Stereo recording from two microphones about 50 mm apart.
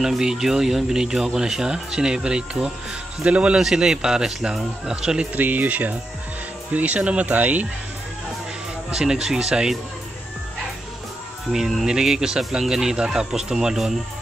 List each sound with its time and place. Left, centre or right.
0.0 s speech: centre
3.3 s speech: right
3.5 s speech: centre
5.3 s speech: right
8.9 s speech: centre
11.5 s speech: centre